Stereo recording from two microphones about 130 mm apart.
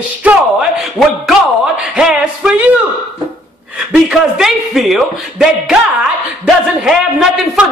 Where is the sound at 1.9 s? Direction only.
5° right (ahead or behind).